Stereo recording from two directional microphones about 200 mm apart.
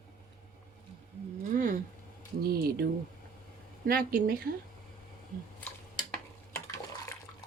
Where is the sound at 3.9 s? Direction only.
50° right (ahead or behind).